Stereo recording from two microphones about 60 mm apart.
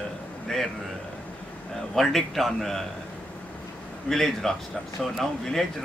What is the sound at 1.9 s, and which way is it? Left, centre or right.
Speech, centre.